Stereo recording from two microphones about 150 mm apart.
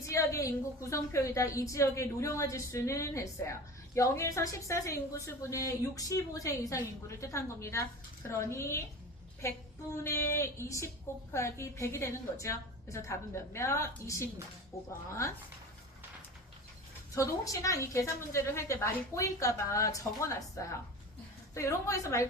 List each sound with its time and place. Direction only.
0.1 s a woman's voice: 20° left (ahead or behind)
17.2 s a woman's voice: 20° left (ahead or behind)